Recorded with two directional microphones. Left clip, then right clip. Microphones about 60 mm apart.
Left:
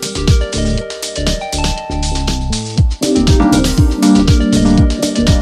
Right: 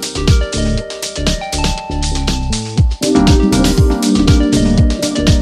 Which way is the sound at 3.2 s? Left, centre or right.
Centre.